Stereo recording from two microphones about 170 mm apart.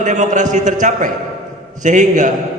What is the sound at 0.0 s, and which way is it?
A man's voice, 45° right (ahead or behind).